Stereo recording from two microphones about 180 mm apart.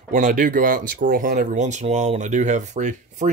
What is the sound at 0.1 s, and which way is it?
Speech, 50° right (ahead or behind).